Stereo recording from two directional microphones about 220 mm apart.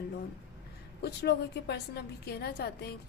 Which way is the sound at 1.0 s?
50° left (ahead or behind).